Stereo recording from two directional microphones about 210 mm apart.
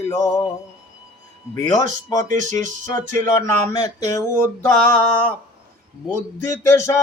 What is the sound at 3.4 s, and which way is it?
Mantra, 15° left (ahead or behind).